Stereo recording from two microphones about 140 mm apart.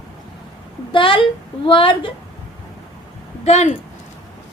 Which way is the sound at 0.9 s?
40° left (ahead or behind).